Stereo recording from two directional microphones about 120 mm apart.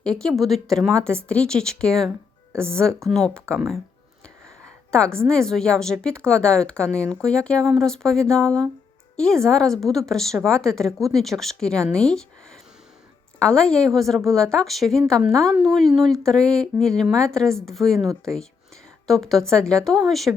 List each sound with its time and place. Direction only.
0.0 s a woman's voice: 5° left (ahead or behind)
4.9 s a woman's voice: 5° left (ahead or behind)
13.4 s a woman's voice: 5° left (ahead or behind)